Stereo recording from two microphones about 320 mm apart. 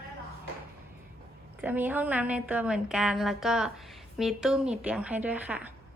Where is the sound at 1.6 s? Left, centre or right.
Centre.